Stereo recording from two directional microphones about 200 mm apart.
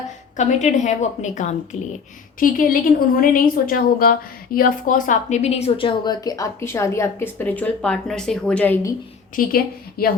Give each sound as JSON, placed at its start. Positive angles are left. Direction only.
{"t": 0.3, "sound": "a woman's voice", "side_deg": 35}
{"t": 9.3, "sound": "a woman's voice", "side_deg": 45}